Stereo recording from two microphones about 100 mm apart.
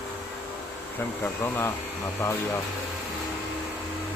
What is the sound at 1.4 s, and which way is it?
Speech, 25° left (ahead or behind).